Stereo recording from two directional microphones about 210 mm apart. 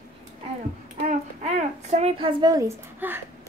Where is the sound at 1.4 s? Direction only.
30° right (ahead or behind); by 3.2 s 15° right (ahead or behind).